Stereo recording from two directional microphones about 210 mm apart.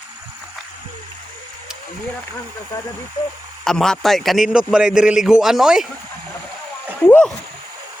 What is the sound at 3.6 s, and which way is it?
A man's voice, 5° left (ahead or behind).